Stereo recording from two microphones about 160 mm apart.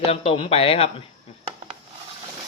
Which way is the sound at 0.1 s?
35° left (ahead or behind).